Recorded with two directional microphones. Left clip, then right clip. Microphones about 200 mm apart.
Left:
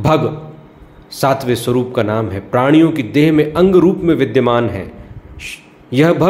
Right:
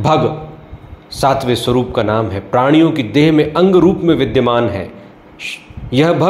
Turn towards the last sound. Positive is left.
turn(degrees=10)  # may be behind; listen again after turning